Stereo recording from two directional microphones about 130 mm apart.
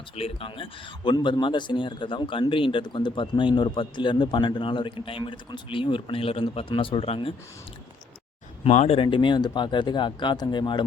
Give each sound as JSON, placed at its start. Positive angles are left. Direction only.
{"t": 0.2, "sound": "speech", "side_deg": 45}
{"t": 8.6, "sound": "speech", "side_deg": 55}
{"t": 9.0, "sound": "speech", "side_deg": 40}